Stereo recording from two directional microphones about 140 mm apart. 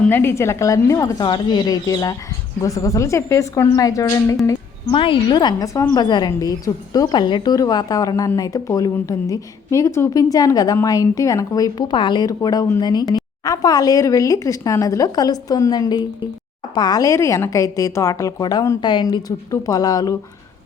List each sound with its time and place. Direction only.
0.0 s a woman's voice: 15° left (ahead or behind)
4.9 s a woman's voice: 40° left (ahead or behind)